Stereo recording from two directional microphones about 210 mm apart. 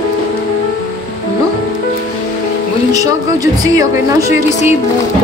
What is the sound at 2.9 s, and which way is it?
A woman's voice, 15° right (ahead or behind).